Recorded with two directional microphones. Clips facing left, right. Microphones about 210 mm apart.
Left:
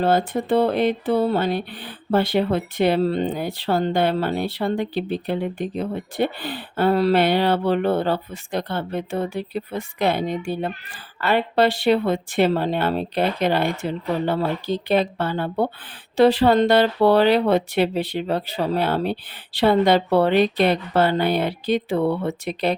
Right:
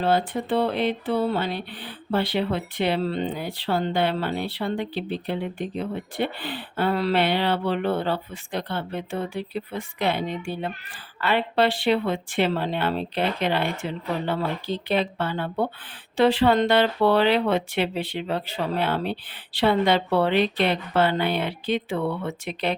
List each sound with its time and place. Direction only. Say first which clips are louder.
0.0 s speech: left 3 dB; 45° left (ahead or behind)